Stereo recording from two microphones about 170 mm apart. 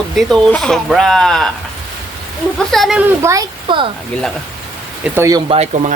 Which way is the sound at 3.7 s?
30° right (ahead or behind).